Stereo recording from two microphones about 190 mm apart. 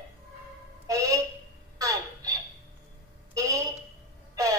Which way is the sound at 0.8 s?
15° right (ahead or behind).